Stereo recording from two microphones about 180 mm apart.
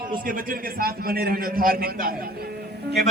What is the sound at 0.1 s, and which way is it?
A man's voice, 50° right (ahead or behind).